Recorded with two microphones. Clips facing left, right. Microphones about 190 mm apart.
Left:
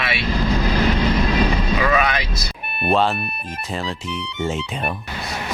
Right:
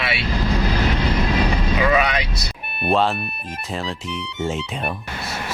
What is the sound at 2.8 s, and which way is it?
Speech, centre (ahead or behind).